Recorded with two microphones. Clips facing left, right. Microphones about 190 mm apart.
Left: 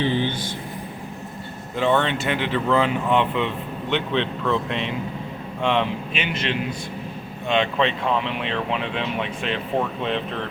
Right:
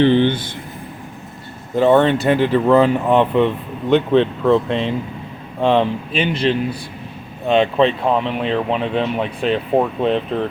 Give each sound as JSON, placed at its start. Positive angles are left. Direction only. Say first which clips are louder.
{"t": 0.0, "sound": "speech", "louder": "right 9 dB", "side_deg": -70}
{"t": 1.7, "sound": "speech", "louder": "right 8 dB", "side_deg": -40}